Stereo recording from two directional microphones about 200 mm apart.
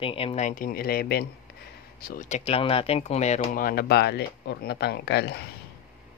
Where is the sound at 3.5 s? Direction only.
45° left (ahead or behind).